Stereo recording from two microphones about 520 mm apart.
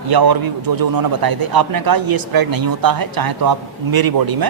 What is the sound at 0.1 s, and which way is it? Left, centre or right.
Speech, right.